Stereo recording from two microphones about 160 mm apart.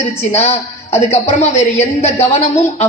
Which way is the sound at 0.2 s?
40° left (ahead or behind).